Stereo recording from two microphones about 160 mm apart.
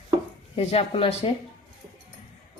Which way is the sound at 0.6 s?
40° left (ahead or behind).